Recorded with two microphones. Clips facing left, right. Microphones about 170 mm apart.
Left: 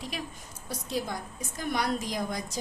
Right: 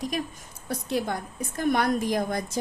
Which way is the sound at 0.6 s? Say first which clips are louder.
Right 5 dB; 60° right (ahead or behind).